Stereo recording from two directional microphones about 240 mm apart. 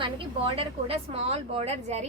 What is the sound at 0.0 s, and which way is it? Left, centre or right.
A woman's voice, right.